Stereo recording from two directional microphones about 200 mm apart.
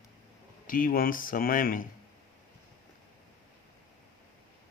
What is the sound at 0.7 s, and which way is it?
Speech, 45° left (ahead or behind).